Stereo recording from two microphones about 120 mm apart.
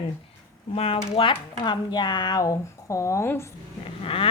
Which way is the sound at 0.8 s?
50° left (ahead or behind).